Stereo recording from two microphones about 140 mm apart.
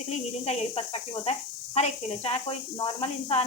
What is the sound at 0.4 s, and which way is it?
Speech, 45° left (ahead or behind).